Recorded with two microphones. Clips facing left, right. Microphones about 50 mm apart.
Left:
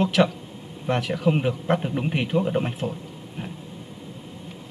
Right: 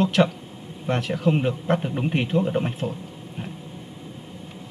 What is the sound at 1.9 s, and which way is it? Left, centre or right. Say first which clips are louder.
Speech: right 1 dB; centre.